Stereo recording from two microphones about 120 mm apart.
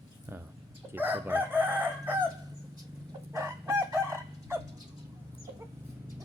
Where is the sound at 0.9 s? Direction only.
15° right (ahead or behind).